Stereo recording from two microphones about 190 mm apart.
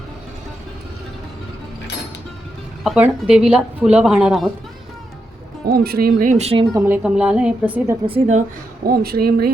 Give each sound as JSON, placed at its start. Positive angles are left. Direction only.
{"t": 2.8, "sound": "a woman's voice", "side_deg": -5}
{"t": 5.6, "sound": "a woman's voice", "side_deg": -55}
{"t": 6.7, "sound": "a woman's voice", "side_deg": -10}
{"t": 8.0, "sound": "a woman's voice", "side_deg": -35}